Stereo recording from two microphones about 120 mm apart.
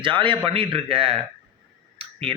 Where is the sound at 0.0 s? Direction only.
45° right (ahead or behind).